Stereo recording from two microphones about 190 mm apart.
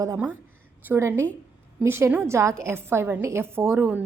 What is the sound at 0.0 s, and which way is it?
A woman's voice, 15° right (ahead or behind).